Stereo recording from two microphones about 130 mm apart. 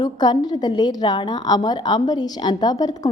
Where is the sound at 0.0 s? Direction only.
30° left (ahead or behind).